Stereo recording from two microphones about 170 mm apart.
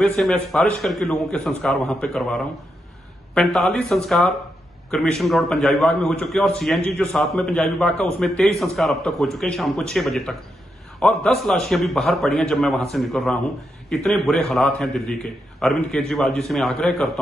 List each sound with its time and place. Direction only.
0.0 s a man's voice: 5° left (ahead or behind)